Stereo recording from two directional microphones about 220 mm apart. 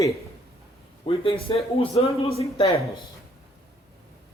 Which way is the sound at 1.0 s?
25° left (ahead or behind).